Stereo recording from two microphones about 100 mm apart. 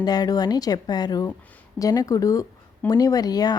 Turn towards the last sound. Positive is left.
turn(degrees=40)  # may be behind; listen again after turning